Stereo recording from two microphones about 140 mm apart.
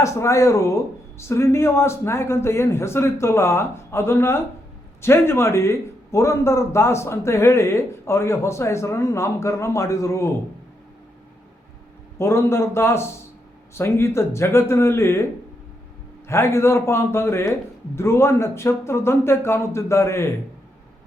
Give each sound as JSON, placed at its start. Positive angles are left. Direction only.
{"t": 0.0, "sound": "a man's voice", "side_deg": 20}
{"t": 12.2, "sound": "a man's voice", "side_deg": 20}
{"t": 16.3, "sound": "a man's voice", "side_deg": 20}